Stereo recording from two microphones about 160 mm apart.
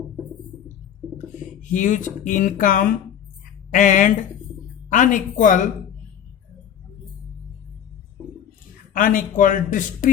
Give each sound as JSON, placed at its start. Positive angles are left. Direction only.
{"t": 1.6, "sound": "speech", "side_deg": 50}
{"t": 8.9, "sound": "speech", "side_deg": 60}